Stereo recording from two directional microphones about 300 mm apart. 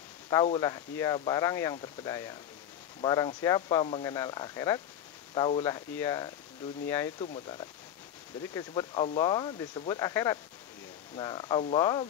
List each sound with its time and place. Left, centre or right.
0.3 s speech: centre